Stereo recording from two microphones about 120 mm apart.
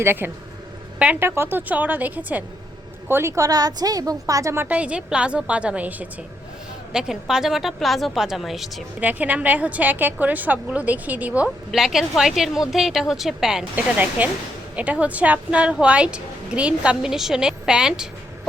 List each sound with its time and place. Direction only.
0.0 s a woman's voice: 20° right (ahead or behind); by 8.8 s centre (ahead or behind)
9.0 s a woman's voice: 15° right (ahead or behind)
11.7 s a woman's voice: centre (ahead or behind)